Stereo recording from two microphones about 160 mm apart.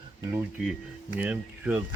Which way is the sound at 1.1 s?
5° right (ahead or behind).